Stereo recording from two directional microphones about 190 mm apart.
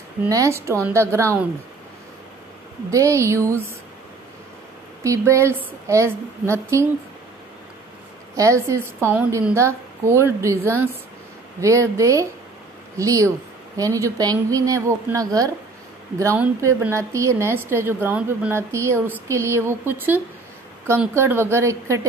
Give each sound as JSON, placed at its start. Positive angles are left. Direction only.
{"t": 0.2, "sound": "a woman's voice", "side_deg": -15}
{"t": 2.9, "sound": "a woman's voice", "side_deg": -15}
{"t": 5.0, "sound": "a woman's voice", "side_deg": -15}
{"t": 8.4, "sound": "a woman's voice", "side_deg": -15}